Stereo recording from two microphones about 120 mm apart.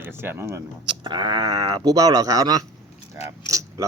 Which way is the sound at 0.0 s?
20° right (ahead or behind).